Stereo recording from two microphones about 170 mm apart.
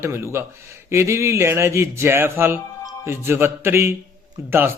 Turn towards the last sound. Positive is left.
turn(degrees=-15)  # may be behind; listen again after turning